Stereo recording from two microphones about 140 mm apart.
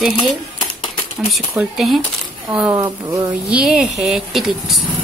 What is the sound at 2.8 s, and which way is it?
Speech, 25° right (ahead or behind).